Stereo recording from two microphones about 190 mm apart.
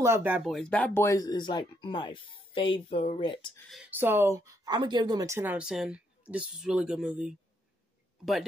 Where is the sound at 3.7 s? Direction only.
10° right (ahead or behind).